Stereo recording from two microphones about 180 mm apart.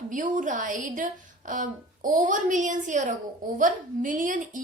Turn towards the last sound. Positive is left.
turn(degrees=-45)  # may be behind; listen again after turning